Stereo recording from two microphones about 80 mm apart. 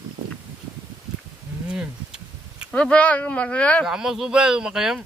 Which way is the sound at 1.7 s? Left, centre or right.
Centre.